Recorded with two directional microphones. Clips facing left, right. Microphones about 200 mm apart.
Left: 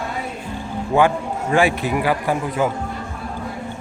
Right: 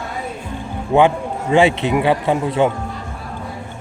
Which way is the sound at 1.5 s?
20° right (ahead or behind).